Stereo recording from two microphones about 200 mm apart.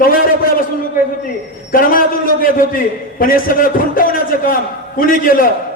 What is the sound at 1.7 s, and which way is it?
A man's voice, 45° left (ahead or behind).